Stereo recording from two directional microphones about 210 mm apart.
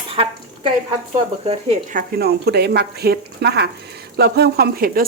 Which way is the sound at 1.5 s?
35° right (ahead or behind).